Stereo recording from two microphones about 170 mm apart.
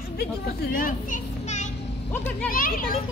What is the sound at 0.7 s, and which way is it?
A child's voice, 50° left (ahead or behind).